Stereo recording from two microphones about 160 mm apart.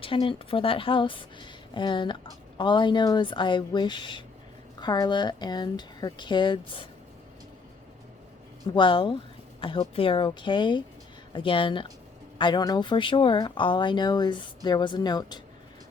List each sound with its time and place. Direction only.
0.0 s speech: 35° left (ahead or behind)
8.7 s speech: 30° left (ahead or behind)